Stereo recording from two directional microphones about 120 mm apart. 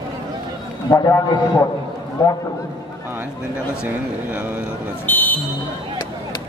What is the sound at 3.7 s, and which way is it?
Speech, 10° right (ahead or behind).